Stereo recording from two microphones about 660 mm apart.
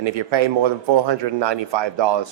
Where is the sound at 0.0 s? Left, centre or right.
Right.